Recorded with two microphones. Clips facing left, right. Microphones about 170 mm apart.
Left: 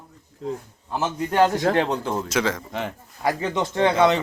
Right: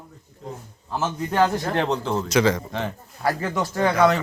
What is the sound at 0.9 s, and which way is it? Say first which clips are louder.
A man's voice: left 1 dB; 15° left (ahead or behind).